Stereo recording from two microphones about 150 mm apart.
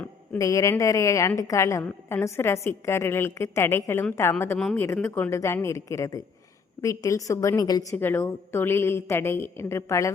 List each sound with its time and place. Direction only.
0.3 s a woman's voice: 20° left (ahead or behind)
7.9 s a woman's voice: 15° left (ahead or behind)